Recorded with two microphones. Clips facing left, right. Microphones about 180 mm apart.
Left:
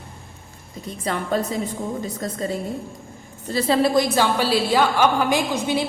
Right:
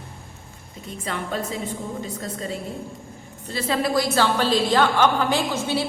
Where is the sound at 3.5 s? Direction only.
40° left (ahead or behind).